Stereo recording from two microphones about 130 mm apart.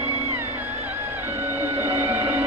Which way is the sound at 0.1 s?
20° right (ahead or behind).